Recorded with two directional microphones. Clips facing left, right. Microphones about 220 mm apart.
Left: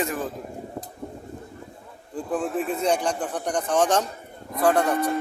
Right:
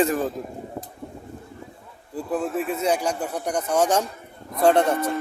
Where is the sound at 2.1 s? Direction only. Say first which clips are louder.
Right 1 dB; 10° right (ahead or behind).